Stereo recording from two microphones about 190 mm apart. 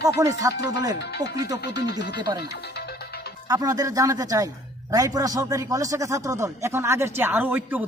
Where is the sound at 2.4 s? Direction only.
60° left (ahead or behind).